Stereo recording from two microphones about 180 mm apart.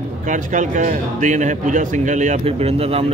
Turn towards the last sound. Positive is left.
turn(degrees=-30)  # may be behind; listen again after turning